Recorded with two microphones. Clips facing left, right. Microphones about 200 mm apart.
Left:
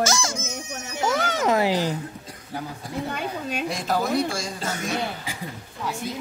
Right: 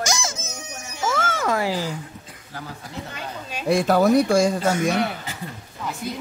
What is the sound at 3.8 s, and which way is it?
Speech, 60° right (ahead or behind).